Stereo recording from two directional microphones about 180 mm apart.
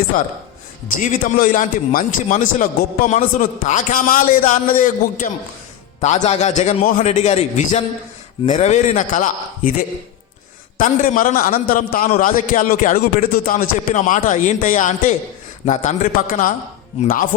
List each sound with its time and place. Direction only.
0.1 s a man's voice: 50° left (ahead or behind)
10.8 s a man's voice: 45° left (ahead or behind)